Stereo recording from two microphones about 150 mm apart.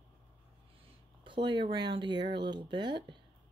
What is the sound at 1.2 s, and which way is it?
Speech, 30° right (ahead or behind).